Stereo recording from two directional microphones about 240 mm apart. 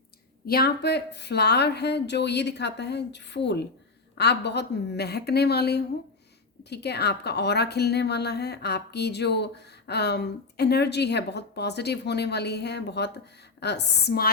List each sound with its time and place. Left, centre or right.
0.4 s a woman's voice: left